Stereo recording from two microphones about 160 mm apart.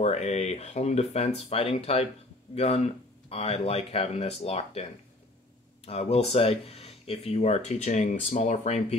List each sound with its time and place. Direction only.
0.0 s speech: 45° left (ahead or behind)
5.9 s speech: 40° left (ahead or behind)